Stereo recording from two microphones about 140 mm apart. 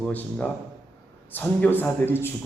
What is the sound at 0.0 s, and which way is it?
A man's voice, 10° left (ahead or behind).